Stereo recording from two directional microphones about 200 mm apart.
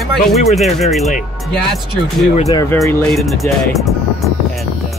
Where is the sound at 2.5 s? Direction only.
15° left (ahead or behind).